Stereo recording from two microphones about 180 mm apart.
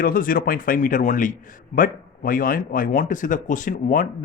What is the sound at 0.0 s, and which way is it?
Speech, 50° left (ahead or behind).